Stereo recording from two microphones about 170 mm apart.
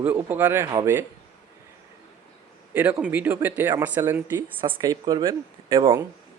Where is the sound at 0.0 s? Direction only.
10° right (ahead or behind).